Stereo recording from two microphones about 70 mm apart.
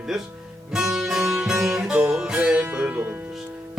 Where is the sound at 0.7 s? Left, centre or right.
Centre.